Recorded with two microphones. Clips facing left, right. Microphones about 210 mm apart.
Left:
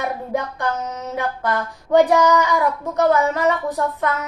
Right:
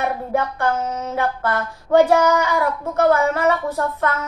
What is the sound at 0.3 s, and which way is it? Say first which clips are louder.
Speech: right 3 dB; 15° left (ahead or behind).